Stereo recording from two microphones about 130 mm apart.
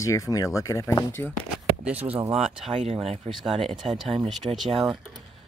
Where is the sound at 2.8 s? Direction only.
50° right (ahead or behind).